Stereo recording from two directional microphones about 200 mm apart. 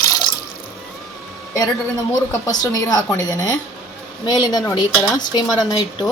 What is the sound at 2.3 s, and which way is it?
A woman's voice, 20° left (ahead or behind).